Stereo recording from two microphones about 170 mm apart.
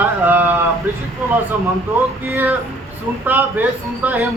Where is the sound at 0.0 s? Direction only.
10° right (ahead or behind).